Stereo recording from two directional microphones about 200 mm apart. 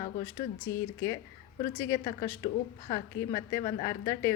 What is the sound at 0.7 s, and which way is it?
Speech, 15° left (ahead or behind).